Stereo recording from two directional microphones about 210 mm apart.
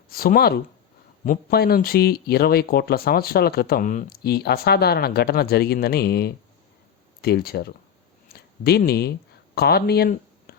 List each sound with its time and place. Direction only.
0.1 s speech: 45° left (ahead or behind)